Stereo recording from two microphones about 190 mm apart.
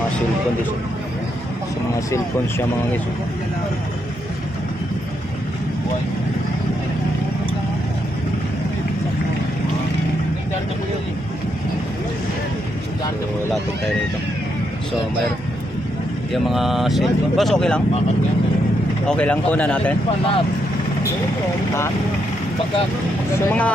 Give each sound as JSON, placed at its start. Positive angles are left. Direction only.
{"t": 2.0, "sound": "speech", "side_deg": 15}
{"t": 16.3, "sound": "speech", "side_deg": 0}
{"t": 19.0, "sound": "speech", "side_deg": 5}
{"t": 23.5, "sound": "speech", "side_deg": 5}